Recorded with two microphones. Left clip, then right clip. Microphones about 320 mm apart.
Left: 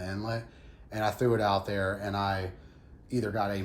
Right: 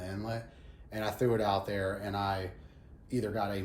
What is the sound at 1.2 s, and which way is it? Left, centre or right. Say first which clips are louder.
Speech: left 1 dB; centre.